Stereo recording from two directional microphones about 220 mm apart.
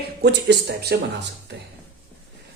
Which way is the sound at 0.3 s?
50° right (ahead or behind).